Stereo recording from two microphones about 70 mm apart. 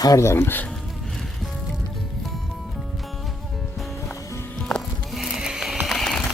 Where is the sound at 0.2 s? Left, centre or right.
Left.